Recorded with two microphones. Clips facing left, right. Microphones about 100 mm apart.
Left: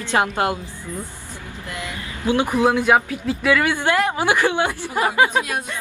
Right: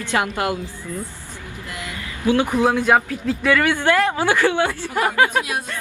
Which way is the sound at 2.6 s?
5° left (ahead or behind).